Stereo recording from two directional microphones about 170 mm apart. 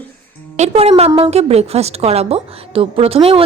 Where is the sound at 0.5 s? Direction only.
40° right (ahead or behind).